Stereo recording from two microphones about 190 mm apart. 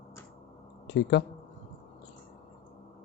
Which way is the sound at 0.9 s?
65° left (ahead or behind).